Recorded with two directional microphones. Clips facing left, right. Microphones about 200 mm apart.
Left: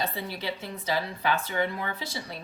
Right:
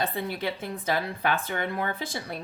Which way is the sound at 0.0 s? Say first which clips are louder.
Right 3 dB; 50° right (ahead or behind).